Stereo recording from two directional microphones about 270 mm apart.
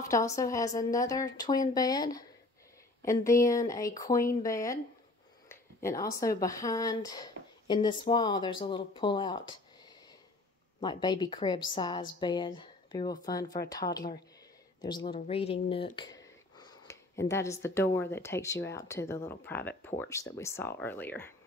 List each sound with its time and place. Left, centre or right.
0.4 s speech: centre
10.8 s speech: centre
15.7 s a sound: centre
18.1 s speech: centre